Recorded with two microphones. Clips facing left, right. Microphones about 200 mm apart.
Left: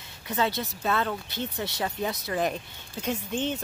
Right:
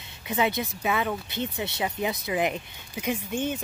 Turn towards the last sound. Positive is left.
turn(degrees=-10)  # may be behind; listen again after turning